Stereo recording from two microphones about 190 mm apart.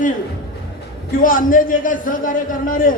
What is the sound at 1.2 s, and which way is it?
A man's voice, 45° left (ahead or behind).